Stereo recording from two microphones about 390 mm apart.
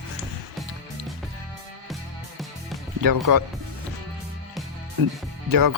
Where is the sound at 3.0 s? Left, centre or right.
Right.